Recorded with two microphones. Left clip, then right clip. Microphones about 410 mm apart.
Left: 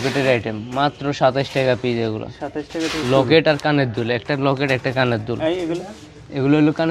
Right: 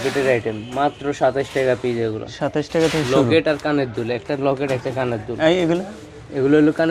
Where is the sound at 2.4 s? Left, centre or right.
Right.